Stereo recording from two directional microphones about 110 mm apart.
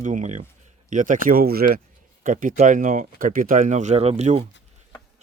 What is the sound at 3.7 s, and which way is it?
Speech, 90° right.